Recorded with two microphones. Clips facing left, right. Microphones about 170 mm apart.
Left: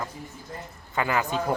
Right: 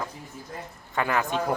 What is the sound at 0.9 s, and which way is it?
Speech, centre (ahead or behind).